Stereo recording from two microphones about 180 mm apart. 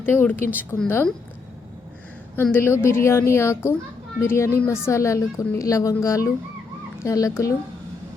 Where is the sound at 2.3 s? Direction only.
10° left (ahead or behind).